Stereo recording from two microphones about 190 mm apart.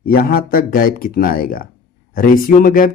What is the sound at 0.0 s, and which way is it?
Speech, 50° left (ahead or behind).